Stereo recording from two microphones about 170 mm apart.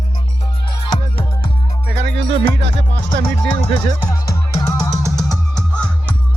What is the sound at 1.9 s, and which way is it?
Music, 90° right.